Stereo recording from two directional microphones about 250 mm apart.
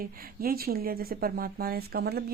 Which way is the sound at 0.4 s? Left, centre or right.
Right.